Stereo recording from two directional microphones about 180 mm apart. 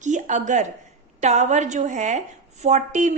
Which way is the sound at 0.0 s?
40° right (ahead or behind).